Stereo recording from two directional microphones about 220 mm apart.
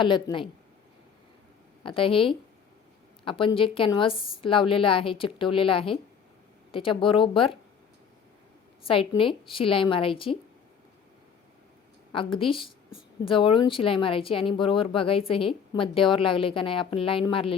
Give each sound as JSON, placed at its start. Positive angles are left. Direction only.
{"t": 0.0, "sound": "a woman's voice", "side_deg": 20}
{"t": 1.8, "sound": "a woman's voice", "side_deg": 25}
{"t": 8.9, "sound": "a woman's voice", "side_deg": 25}
{"t": 12.1, "sound": "a woman's voice", "side_deg": 25}